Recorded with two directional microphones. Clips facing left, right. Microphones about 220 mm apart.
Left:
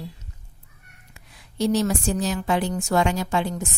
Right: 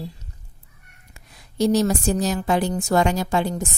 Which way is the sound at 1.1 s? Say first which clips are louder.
Right 4 dB; 40° right (ahead or behind).